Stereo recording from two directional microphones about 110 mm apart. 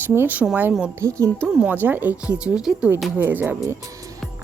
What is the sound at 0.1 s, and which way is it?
Speech, 20° right (ahead or behind).